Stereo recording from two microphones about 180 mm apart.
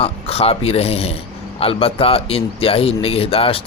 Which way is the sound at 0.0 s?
35° left (ahead or behind).